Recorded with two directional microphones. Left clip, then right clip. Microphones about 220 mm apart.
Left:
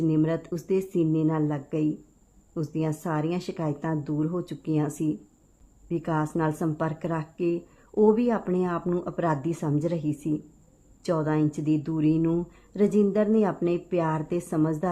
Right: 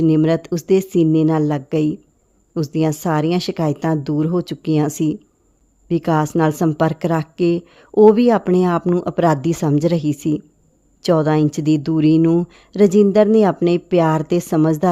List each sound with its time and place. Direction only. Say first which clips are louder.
0.0 s a woman's voice: right 10 dB; 40° right (ahead or behind)